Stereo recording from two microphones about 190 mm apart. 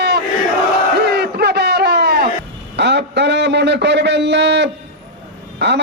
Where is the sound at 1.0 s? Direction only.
60° right (ahead or behind).